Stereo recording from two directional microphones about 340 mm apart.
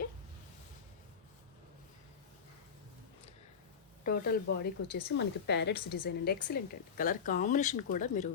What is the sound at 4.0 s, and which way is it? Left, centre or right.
A woman's voice, left.